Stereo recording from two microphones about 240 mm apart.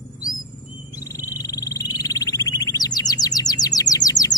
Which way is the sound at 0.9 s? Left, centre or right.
Centre.